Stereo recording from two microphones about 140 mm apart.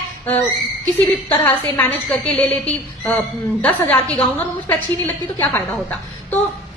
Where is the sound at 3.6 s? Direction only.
15° left (ahead or behind).